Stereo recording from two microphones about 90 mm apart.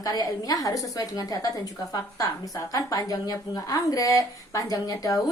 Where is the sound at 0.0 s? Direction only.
40° left (ahead or behind).